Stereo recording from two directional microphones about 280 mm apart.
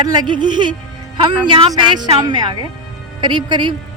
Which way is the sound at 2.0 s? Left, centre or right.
Centre.